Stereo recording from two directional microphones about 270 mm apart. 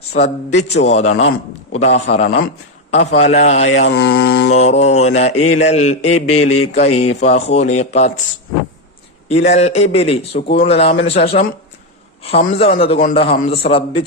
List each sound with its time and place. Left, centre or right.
0.1 s a man's voice: left
3.7 s mantra: left
4.5 s a man's voice: left
6.3 s a sound: left
6.7 s a man's voice: left
9.3 s a man's voice: left
12.5 s a man's voice: left